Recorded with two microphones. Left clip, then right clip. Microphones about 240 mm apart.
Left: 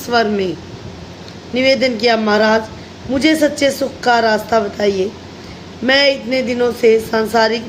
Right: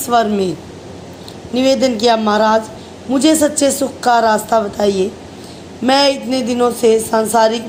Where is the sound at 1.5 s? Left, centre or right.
Centre.